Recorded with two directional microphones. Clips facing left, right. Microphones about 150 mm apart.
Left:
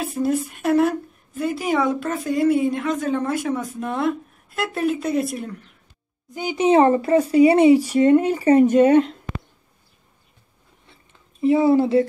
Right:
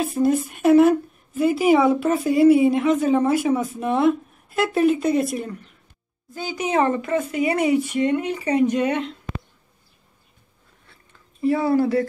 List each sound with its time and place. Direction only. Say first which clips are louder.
0.0 s a woman's voice: right 2 dB; centre (ahead or behind)
6.3 s speech: left 3 dB; 15° left (ahead or behind)
6.6 s speech: left 6 dB; 30° left (ahead or behind)
11.4 s speech: left 3 dB; 20° left (ahead or behind)